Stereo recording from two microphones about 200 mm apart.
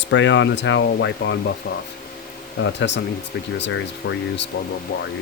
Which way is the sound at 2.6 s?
60° left (ahead or behind).